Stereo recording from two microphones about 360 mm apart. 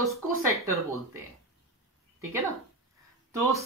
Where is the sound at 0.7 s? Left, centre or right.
Centre.